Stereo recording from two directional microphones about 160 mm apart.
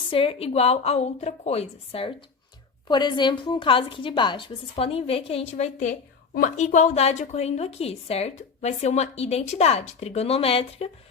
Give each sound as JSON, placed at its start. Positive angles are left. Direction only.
{"t": 0.1, "sound": "a woman's voice", "side_deg": 35}